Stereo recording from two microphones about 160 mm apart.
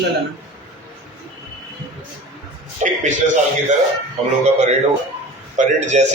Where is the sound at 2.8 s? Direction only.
50° right (ahead or behind).